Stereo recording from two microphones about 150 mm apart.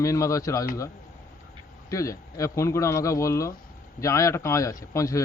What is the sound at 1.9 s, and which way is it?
Speech, 20° left (ahead or behind).